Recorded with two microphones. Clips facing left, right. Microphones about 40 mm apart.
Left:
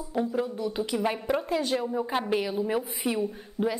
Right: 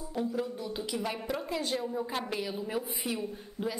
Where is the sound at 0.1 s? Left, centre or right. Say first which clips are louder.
Left 5 dB; left.